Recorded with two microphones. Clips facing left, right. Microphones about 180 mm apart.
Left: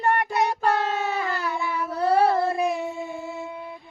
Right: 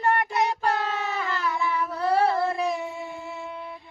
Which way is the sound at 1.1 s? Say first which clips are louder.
Left 1 dB; 30° left (ahead or behind).